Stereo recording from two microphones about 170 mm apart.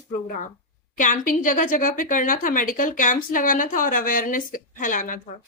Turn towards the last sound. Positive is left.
turn(degrees=50)  # may be behind; listen again after turning